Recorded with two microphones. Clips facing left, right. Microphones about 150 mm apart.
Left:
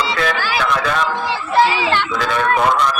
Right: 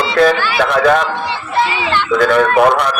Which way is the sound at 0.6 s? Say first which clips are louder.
Right 9 dB; 55° right (ahead or behind).